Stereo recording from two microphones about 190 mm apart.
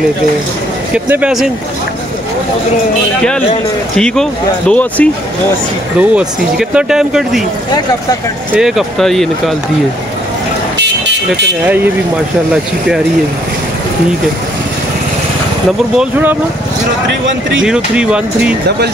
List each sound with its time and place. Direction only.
0.9 s speech: 10° right (ahead or behind)
3.9 s speech: 5° left (ahead or behind)
5.9 s speech: 5° right (ahead or behind)
8.5 s speech: centre (ahead or behind)
10.8 s vehicle: 65° right (ahead or behind)
11.6 s speech: 10° right (ahead or behind)
16.0 s speech: 10° right (ahead or behind)
17.6 s speech: 5° right (ahead or behind)